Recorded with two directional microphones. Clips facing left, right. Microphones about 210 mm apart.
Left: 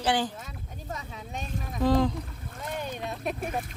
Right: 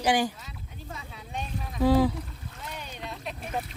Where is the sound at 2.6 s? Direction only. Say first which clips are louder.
Left 7 dB; 50° left (ahead or behind).